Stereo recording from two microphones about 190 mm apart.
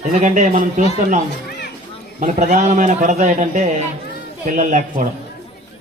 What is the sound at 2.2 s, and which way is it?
A man's voice, 40° right (ahead or behind).